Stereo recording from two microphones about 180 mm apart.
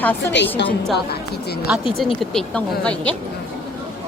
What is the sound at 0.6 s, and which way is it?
Speech, 75° left (ahead or behind).